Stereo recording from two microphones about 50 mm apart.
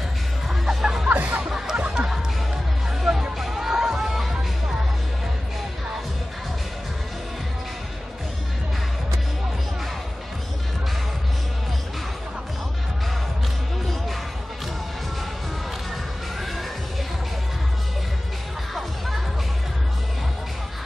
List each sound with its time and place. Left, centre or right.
0.5 s music: centre
1.0 s music: right
3.0 s music: centre
18.8 s music: centre